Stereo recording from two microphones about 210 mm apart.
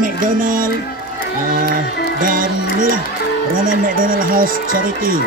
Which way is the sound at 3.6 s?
40° right (ahead or behind).